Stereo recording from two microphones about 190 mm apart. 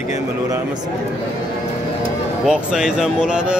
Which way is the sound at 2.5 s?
5° right (ahead or behind).